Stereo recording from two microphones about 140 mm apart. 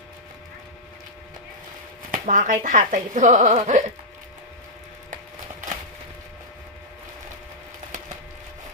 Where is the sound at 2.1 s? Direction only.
70° right (ahead or behind).